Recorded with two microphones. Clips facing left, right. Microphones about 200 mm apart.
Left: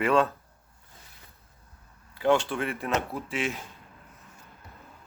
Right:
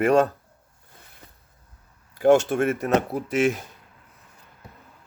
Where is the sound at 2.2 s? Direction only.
45° right (ahead or behind).